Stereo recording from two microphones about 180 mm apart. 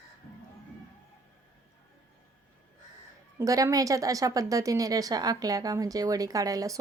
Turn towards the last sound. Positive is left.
turn(degrees=-20)  # may be behind; listen again after turning